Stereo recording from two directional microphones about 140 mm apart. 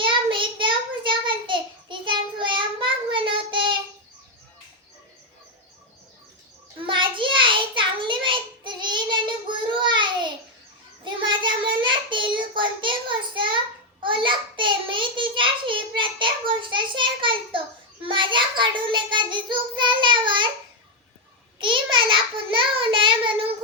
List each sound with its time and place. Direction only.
0.0 s child singing: 35° right (ahead or behind)
6.8 s child singing: 35° right (ahead or behind)
21.6 s child singing: 35° right (ahead or behind)